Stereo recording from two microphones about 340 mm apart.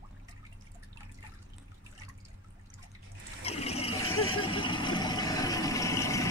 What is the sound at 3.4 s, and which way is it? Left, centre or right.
Water, centre.